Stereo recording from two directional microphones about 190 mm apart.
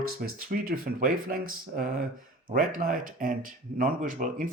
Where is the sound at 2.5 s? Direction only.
50° right (ahead or behind).